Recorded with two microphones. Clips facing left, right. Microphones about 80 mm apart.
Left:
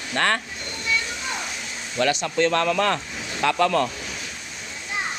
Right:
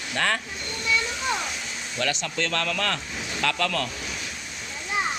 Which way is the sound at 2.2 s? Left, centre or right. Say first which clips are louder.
Left 7 dB; left.